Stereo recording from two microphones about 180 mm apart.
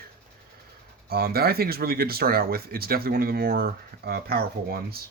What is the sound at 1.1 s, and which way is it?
Speech, 60° right (ahead or behind).